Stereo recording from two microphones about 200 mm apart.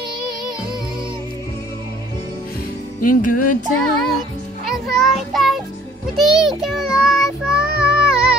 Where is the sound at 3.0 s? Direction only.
40° left (ahead or behind).